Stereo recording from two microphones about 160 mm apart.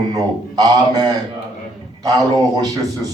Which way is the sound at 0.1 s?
25° right (ahead or behind).